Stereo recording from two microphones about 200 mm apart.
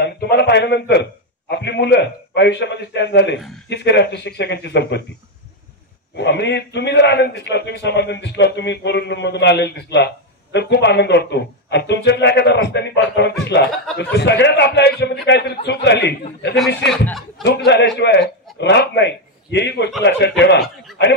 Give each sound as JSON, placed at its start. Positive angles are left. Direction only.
{"t": 0.0, "sound": "a man's voice", "side_deg": 55}
{"t": 6.1, "sound": "a man's voice", "side_deg": 60}
{"t": 17.6, "sound": "a man's voice", "side_deg": 60}